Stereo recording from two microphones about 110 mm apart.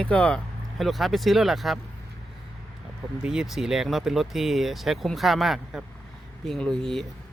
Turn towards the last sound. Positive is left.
turn(degrees=5)  # may be behind; listen again after turning